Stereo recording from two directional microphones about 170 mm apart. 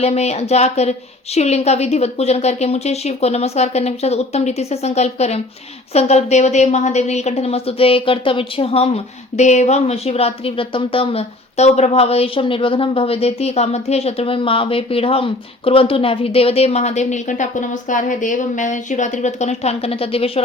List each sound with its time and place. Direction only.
0.0 s speech: 40° left (ahead or behind)